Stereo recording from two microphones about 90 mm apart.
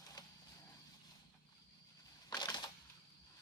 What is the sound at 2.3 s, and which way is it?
Crushing, 55° left (ahead or behind).